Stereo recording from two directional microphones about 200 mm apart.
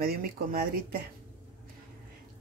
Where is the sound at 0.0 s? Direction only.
45° right (ahead or behind).